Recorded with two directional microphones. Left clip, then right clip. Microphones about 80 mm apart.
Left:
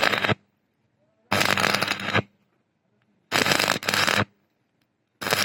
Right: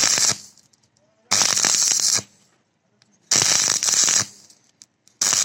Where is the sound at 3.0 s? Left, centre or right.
Centre.